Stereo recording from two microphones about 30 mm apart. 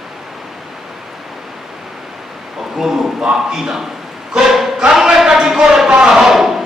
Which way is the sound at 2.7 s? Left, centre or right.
Centre.